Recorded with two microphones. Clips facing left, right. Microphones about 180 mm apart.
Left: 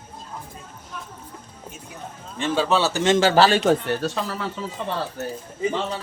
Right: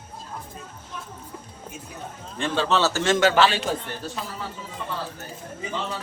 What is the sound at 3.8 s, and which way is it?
Speech, 75° left (ahead or behind).